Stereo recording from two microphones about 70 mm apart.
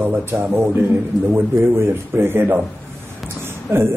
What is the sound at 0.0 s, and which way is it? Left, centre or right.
Speech, right.